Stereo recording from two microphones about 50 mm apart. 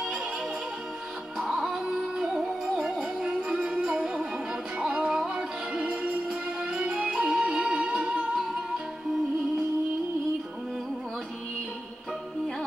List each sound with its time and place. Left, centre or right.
1.4 s music: centre; by 8.4 s right